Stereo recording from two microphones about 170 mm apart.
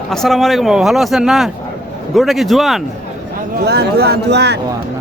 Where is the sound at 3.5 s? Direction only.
70° right (ahead or behind).